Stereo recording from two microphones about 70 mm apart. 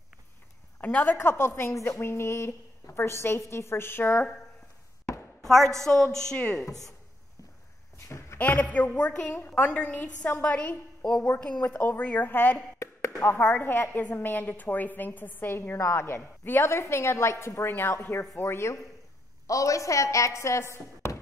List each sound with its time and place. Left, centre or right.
0.7 s a woman's voice: left
1.4 s a woman's voice: left
5.4 s a woman's voice: centre
8.4 s a woman's voice: left
12.7 s a sound: left
13.2 s a woman's voice: left
17.6 s a woman's voice: left
19.4 s speech: left